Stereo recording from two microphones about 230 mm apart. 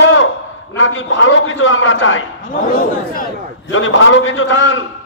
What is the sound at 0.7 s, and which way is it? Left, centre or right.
A man's voice, left.